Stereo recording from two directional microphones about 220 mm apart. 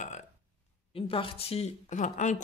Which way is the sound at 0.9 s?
25° left (ahead or behind).